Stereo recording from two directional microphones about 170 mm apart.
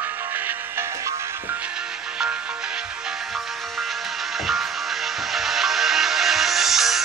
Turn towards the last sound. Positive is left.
turn(degrees=0)  # may be behind; listen again after turning